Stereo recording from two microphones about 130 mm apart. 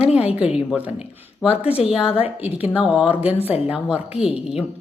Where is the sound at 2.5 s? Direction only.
50° left (ahead or behind).